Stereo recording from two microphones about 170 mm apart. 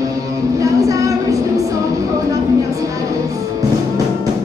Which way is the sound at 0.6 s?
20° right (ahead or behind).